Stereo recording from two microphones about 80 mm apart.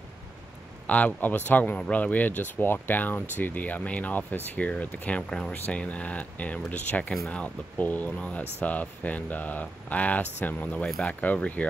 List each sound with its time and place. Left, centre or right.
0.8 s speech: centre